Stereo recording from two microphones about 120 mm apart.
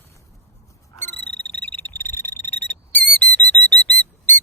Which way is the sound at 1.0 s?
15° left (ahead or behind).